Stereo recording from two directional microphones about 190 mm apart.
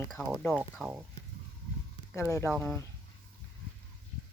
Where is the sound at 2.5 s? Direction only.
Centre (ahead or behind).